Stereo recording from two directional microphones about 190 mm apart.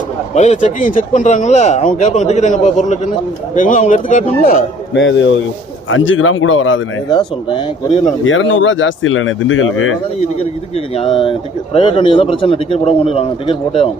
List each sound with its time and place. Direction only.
0.3 s a man's voice: 40° left (ahead or behind)
4.9 s speech: 75° left (ahead or behind)
5.9 s speech: 90° left
7.5 s a man's voice: 25° left (ahead or behind)
8.2 s speech: 90° left
10.9 s a man's voice: 30° left (ahead or behind)